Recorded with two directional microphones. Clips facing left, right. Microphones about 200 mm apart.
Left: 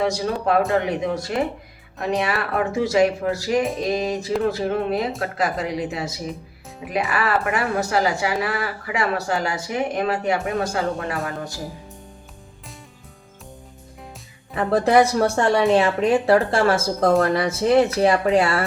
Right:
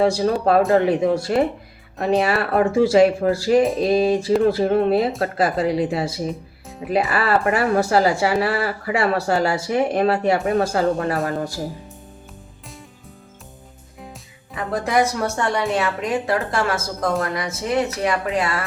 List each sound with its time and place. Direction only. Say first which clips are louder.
0.0 s speech: right 4 dB; 30° right (ahead or behind)
3.6 s music: right 5 dB; centre (ahead or behind)
3.8 s speech: right 6 dB; 30° right (ahead or behind)
14.5 s speech: left 4 dB; 30° left (ahead or behind)